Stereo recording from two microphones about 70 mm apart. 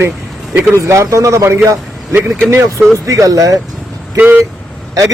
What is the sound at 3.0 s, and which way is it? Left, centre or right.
Speech, right.